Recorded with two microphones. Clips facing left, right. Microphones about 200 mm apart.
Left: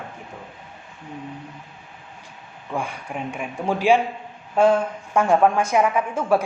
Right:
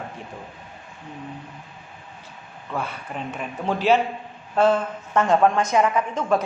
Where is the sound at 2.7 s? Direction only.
15° left (ahead or behind).